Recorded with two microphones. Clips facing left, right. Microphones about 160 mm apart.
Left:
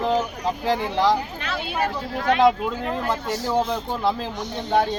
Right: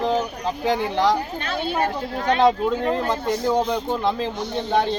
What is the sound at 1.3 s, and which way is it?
Speech, 35° right (ahead or behind).